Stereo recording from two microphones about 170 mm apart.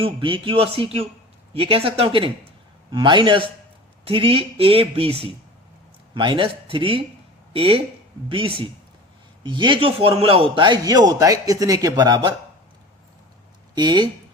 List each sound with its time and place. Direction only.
0.0 s a man's voice: 30° right (ahead or behind)
13.7 s a man's voice: 25° right (ahead or behind)